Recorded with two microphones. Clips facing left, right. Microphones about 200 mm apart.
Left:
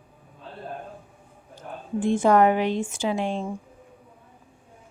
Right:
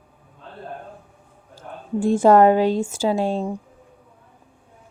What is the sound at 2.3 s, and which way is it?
A woman's voice, 40° right (ahead or behind).